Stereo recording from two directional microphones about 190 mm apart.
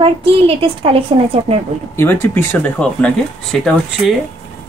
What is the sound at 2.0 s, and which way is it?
Speech, 10° left (ahead or behind).